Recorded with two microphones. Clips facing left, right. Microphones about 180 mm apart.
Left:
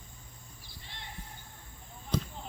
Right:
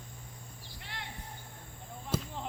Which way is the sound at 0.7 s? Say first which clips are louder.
Right 5 dB; 80° right.